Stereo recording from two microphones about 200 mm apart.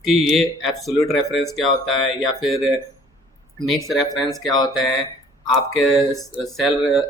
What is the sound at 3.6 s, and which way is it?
Speech, centre (ahead or behind).